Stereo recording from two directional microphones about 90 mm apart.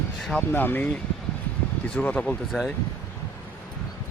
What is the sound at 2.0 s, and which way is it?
Speech, 15° left (ahead or behind).